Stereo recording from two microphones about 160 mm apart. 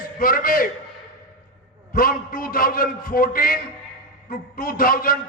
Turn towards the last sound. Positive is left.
turn(degrees=60)  # may be behind; listen again after turning